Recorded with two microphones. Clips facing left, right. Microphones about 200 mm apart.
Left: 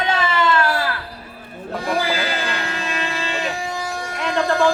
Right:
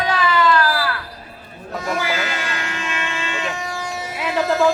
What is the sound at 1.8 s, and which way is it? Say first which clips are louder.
Music: left 1 dB; 30° left (ahead or behind).